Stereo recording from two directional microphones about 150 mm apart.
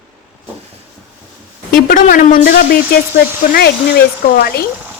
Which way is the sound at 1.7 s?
65° left (ahead or behind).